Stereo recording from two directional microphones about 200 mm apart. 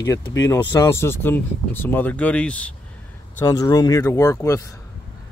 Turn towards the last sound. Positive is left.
turn(degrees=15)  # may be behind; listen again after turning